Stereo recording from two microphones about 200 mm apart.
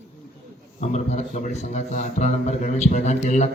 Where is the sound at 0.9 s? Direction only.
35° left (ahead or behind).